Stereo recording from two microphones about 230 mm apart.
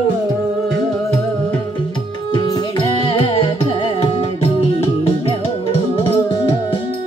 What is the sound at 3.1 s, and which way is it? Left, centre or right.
Music, left.